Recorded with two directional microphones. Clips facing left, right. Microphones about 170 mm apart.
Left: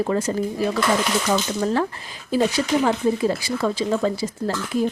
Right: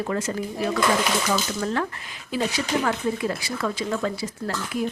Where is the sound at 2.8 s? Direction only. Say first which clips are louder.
Left 5 dB; 30° left (ahead or behind).